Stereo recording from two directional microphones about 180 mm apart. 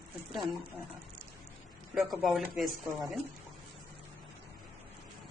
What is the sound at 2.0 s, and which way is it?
Speech, centre (ahead or behind).